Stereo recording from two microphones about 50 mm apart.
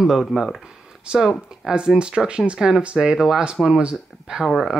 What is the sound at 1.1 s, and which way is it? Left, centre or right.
Speech, centre.